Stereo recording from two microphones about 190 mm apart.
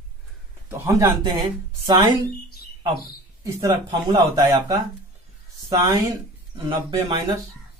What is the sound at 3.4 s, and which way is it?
Speech, 15° right (ahead or behind).